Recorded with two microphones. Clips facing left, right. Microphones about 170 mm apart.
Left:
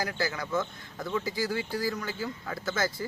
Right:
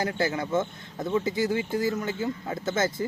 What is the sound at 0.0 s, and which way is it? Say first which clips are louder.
A man's voice: right 5 dB; 25° right (ahead or behind).